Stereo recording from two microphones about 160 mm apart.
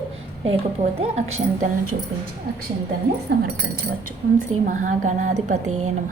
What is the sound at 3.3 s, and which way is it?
Speech, 90° right.